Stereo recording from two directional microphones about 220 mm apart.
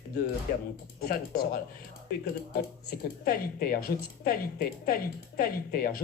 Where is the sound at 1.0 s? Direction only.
45° left (ahead or behind).